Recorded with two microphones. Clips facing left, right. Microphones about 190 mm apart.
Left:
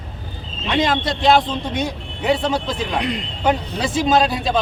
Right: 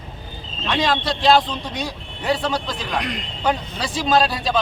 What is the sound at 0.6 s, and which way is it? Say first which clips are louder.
A man's voice: left 2 dB; 20° left (ahead or behind).